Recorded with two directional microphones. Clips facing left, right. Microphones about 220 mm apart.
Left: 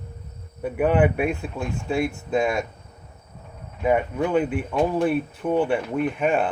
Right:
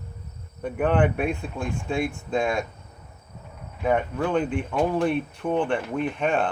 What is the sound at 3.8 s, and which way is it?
Speech, 10° left (ahead or behind).